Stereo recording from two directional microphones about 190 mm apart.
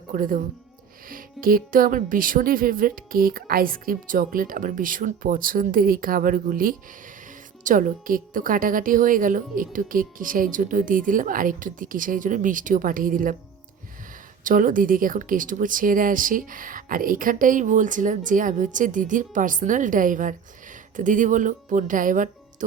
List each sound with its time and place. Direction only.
0.1 s speech: 45° right (ahead or behind)
14.4 s speech: 45° right (ahead or behind)